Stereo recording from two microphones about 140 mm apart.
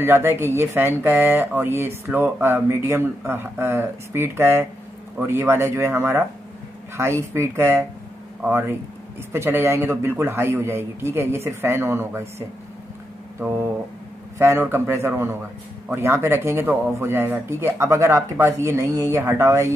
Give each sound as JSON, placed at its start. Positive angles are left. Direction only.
{"t": 0.0, "sound": "speech", "side_deg": -15}
{"t": 7.3, "sound": "speech", "side_deg": -20}